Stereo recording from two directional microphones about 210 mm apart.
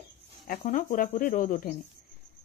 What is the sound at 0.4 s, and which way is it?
Speech, 40° left (ahead or behind).